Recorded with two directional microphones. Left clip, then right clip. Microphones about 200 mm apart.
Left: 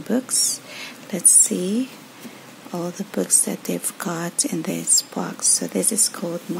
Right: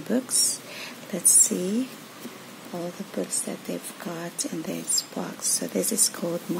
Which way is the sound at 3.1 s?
25° left (ahead or behind).